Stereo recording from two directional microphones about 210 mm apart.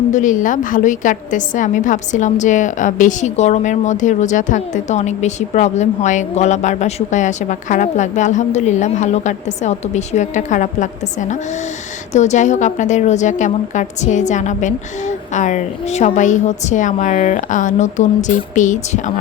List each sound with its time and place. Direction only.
0.1 s a woman's voice: 35° left (ahead or behind)